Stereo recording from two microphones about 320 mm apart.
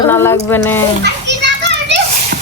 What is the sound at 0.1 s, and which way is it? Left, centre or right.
Speech, centre.